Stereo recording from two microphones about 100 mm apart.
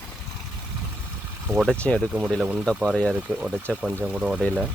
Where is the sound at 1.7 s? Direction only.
10° left (ahead or behind).